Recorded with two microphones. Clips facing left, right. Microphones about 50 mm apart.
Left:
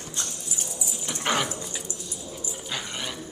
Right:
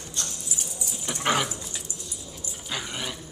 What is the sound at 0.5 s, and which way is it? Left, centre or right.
Dog, centre.